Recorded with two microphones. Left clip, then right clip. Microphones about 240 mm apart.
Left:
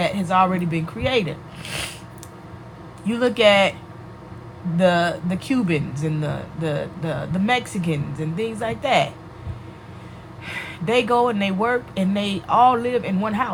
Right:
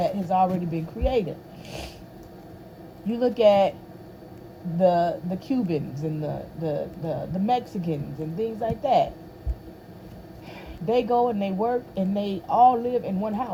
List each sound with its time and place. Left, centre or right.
0.1 s speech: left
3.1 s speech: left
4.8 s speech: left
10.5 s speech: left